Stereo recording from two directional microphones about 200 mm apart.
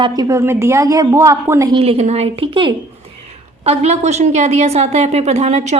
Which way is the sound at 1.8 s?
30° right (ahead or behind).